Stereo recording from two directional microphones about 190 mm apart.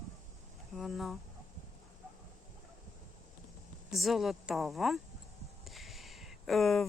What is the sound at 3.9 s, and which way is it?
Speech, centre (ahead or behind).